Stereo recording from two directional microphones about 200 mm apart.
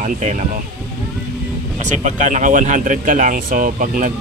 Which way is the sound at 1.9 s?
35° right (ahead or behind).